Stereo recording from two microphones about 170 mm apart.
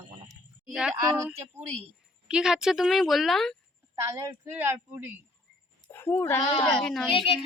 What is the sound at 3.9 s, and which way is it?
A woman's voice, 15° right (ahead or behind).